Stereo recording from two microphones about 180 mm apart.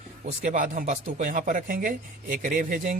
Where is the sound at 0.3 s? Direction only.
45° right (ahead or behind).